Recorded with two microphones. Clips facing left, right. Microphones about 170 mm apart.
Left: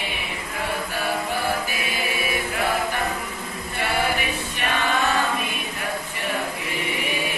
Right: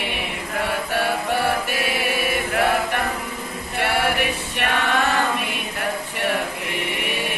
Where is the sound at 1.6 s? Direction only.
65° right (ahead or behind).